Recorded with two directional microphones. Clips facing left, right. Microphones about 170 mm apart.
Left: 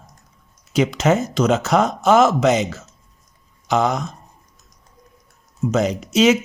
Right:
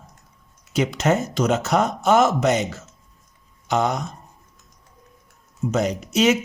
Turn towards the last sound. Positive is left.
turn(degrees=90)